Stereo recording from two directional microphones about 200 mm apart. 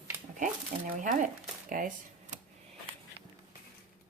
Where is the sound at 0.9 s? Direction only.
40° right (ahead or behind).